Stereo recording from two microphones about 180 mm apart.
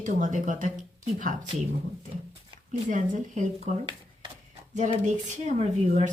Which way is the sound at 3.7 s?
40° right (ahead or behind).